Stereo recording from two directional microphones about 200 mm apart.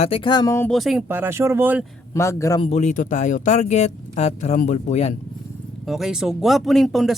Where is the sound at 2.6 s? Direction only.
35° left (ahead or behind).